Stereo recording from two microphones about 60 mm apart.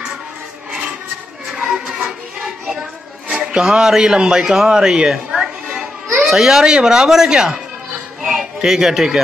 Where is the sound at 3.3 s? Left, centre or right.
Centre.